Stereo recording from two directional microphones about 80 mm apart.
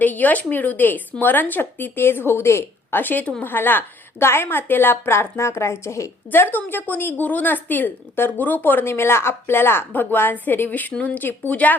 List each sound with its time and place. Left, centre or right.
0.0 s a woman's voice: left
6.3 s a woman's voice: left